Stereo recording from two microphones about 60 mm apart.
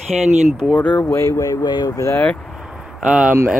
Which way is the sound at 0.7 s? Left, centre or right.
Left.